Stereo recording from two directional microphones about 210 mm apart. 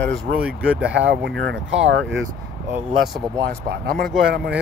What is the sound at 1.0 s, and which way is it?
Speech, 60° right (ahead or behind).